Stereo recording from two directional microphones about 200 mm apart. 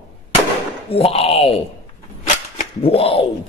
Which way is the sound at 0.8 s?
30° left (ahead or behind).